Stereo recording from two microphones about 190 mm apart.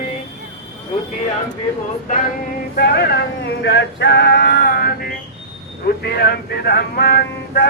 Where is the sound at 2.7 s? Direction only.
55° left (ahead or behind).